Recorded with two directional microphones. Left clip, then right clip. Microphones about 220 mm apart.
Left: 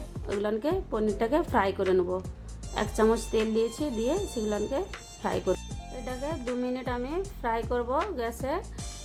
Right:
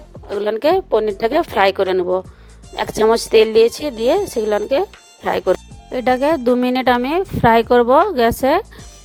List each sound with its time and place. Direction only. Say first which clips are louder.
0.6 s a woman's voice: right 14 dB; 40° right (ahead or behind)